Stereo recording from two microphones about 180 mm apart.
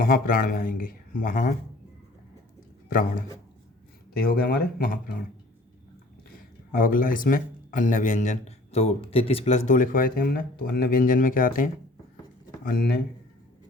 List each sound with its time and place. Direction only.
0.0 s speech: 55° left (ahead or behind)
2.9 s speech: 50° left (ahead or behind)
6.2 s speech: 50° left (ahead or behind)